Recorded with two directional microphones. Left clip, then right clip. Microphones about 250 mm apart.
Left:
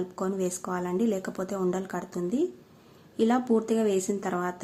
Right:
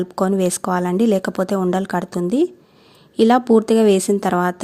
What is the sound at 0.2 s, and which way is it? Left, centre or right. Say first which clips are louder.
Speech: right 13 dB; right.